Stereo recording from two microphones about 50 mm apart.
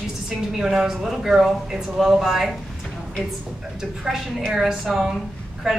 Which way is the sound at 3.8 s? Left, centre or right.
Centre.